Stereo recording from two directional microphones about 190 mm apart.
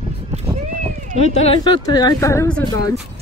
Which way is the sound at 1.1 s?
35° left (ahead or behind).